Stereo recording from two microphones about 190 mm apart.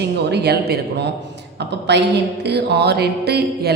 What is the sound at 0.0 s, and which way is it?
Music, 60° right (ahead or behind).